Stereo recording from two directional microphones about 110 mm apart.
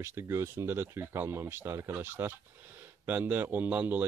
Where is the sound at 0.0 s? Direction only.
25° right (ahead or behind).